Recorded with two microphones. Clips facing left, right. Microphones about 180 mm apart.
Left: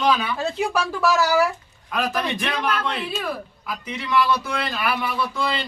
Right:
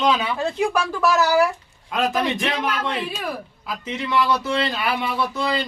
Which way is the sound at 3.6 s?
25° right (ahead or behind).